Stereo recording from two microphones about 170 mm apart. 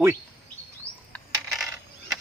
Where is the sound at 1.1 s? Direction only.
Centre (ahead or behind).